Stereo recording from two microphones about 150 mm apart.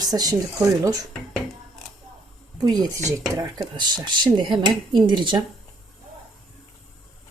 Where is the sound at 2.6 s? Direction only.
25° right (ahead or behind).